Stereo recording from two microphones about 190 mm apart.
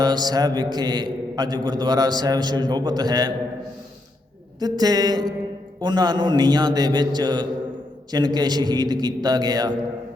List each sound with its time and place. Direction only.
0.0 s a man's voice: 20° right (ahead or behind)
4.6 s a man's voice: 20° right (ahead or behind)